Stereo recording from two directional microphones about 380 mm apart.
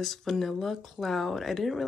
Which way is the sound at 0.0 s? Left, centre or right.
Centre.